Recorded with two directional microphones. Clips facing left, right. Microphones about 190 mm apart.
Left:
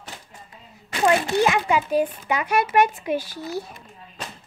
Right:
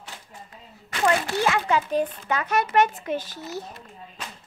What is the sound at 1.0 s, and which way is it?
A child's voice, 20° left (ahead or behind).